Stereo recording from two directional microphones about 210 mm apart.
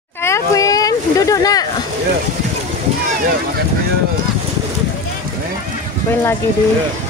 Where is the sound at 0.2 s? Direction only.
15° left (ahead or behind).